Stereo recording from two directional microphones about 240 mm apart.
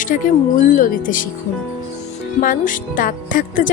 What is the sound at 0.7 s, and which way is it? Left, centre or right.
Speech, left.